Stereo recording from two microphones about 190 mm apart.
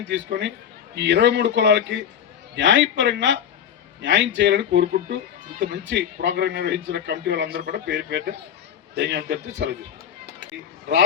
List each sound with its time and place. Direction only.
0.1 s a man's voice: 70° right (ahead or behind)